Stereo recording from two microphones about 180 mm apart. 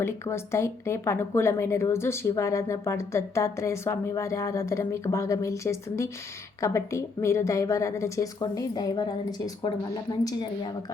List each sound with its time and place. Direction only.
0.0 s speech: 15° left (ahead or behind)